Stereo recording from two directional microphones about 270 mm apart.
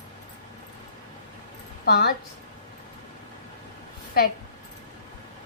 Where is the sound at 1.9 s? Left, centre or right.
Left.